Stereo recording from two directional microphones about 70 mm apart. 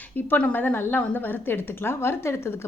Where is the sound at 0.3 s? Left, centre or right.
Left.